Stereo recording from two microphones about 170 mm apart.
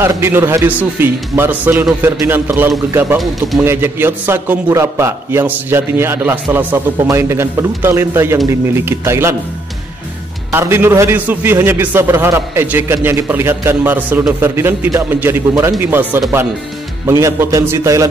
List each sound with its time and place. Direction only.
0.0 s a man's voice: 15° right (ahead or behind)
10.5 s a man's voice: 15° right (ahead or behind)